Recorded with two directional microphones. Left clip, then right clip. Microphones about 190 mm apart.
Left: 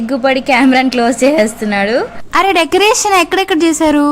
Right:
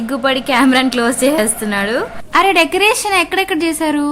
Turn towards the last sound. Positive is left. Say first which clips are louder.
# left 6 dB
turn(degrees=25)  # may be behind; listen again after turning